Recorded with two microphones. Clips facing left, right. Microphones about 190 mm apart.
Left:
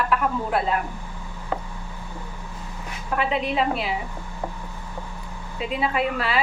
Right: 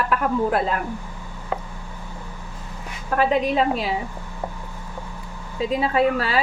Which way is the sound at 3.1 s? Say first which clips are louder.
Right 4 dB; 40° right (ahead or behind).